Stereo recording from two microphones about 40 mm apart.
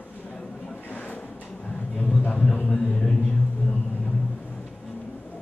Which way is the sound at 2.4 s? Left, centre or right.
Left.